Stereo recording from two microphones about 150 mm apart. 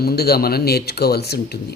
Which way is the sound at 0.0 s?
90° left.